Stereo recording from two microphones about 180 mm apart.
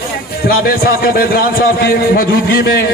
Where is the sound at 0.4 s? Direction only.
55° left (ahead or behind).